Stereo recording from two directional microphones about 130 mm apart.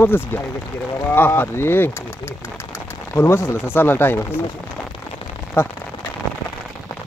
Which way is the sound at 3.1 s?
20° left (ahead or behind).